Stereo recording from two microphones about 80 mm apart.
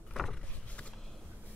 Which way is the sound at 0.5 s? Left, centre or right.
Centre.